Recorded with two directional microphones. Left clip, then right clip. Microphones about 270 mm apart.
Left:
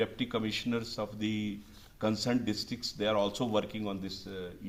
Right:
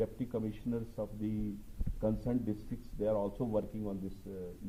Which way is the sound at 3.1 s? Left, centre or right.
Left.